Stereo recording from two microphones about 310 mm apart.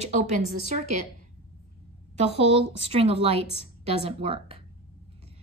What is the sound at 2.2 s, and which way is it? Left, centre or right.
Speech, centre.